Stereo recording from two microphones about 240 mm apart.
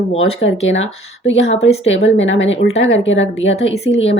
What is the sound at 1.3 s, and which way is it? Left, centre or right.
Speech, left.